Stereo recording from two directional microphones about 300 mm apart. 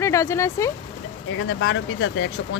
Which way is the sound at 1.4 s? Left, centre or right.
Left.